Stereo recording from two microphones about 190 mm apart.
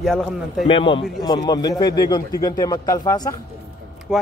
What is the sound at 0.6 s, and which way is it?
A man's voice, 25° left (ahead or behind).